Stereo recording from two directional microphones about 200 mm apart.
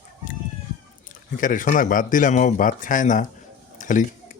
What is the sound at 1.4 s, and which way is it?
Speech, 40° left (ahead or behind).